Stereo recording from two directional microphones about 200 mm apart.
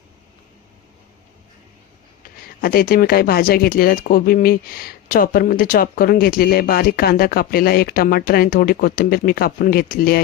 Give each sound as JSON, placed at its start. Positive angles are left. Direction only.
{"t": 2.4, "sound": "speech", "side_deg": 45}